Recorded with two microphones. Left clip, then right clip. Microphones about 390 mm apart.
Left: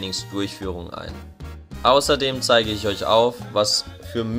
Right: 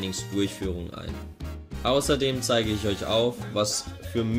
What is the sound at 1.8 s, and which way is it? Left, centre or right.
Speech, centre.